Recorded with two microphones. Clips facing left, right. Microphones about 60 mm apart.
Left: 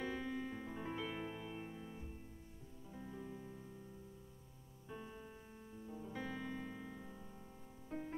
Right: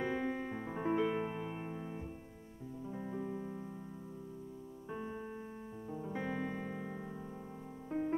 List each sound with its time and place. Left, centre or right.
0.0 s piano: right
2.9 s music: right
5.9 s music: right